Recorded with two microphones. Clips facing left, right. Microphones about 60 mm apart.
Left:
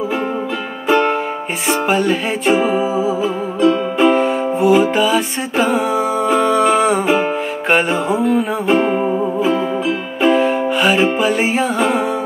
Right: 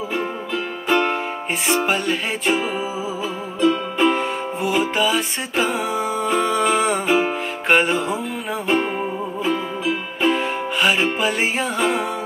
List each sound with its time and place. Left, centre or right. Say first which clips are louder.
0.8 s music: left 5 dB; centre